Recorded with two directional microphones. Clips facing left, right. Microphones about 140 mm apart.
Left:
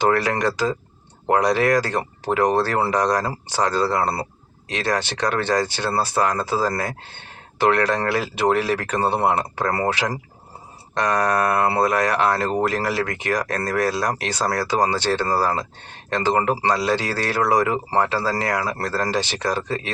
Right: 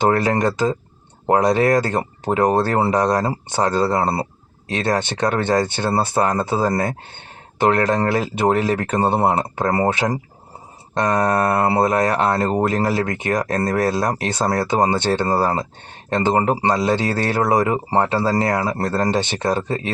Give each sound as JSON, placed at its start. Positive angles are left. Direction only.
{"t": 0.0, "sound": "speech", "side_deg": -25}